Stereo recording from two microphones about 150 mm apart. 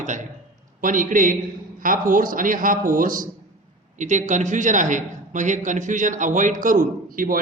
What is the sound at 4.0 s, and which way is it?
A man's voice, 55° right (ahead or behind).